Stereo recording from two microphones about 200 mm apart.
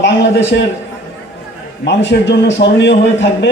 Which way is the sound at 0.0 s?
65° left (ahead or behind).